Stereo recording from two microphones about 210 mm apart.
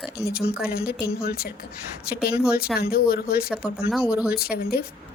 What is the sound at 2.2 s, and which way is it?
Speech, 5° right (ahead or behind).